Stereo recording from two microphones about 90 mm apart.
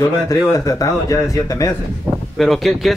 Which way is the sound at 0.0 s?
40° left (ahead or behind).